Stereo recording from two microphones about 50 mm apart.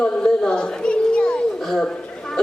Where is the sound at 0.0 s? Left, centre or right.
Centre.